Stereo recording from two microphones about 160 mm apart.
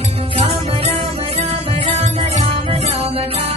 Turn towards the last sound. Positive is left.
turn(degrees=-35)  # may be behind; listen again after turning